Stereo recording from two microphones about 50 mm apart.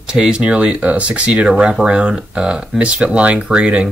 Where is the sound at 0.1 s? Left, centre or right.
Centre.